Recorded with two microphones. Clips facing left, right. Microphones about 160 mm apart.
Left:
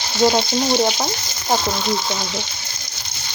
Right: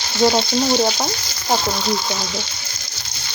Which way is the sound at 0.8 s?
Centre (ahead or behind).